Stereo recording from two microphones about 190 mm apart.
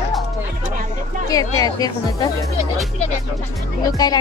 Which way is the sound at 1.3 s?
20° left (ahead or behind).